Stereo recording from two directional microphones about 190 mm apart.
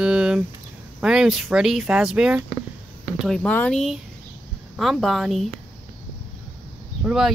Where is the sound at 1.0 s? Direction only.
5° right (ahead or behind).